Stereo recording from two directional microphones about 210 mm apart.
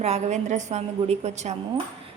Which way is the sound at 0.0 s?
35° right (ahead or behind).